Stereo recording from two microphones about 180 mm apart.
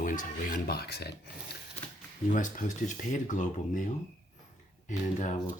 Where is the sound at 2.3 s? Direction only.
45° left (ahead or behind).